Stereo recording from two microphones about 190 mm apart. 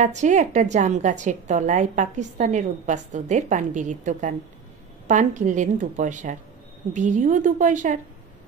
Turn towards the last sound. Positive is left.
turn(degrees=-40)  # may be behind; listen again after turning